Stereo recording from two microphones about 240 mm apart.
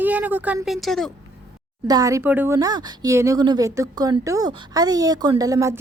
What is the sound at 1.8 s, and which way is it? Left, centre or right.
Speech, centre.